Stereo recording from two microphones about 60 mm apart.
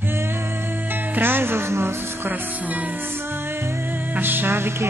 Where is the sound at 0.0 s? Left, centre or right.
Right.